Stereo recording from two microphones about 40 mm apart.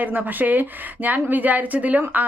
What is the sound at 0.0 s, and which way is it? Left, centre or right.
Speech, right.